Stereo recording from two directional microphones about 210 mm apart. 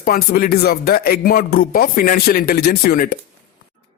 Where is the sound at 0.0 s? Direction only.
45° left (ahead or behind).